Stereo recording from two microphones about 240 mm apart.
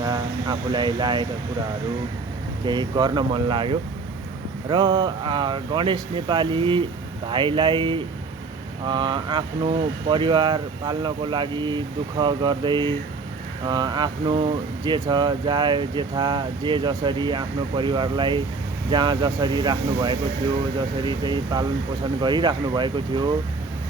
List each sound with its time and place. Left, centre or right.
0.0 s speech: centre
2.6 s speech: centre